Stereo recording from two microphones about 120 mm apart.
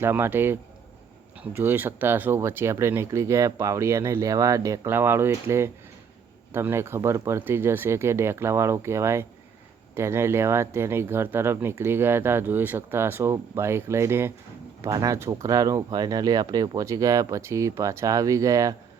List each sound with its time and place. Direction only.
0.0 s a man's voice: 20° right (ahead or behind)